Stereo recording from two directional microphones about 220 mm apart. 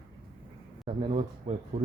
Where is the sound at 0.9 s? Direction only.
30° right (ahead or behind).